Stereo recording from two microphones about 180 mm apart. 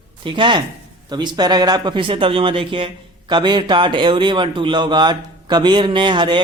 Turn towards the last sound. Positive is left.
turn(degrees=-25)  # may be behind; listen again after turning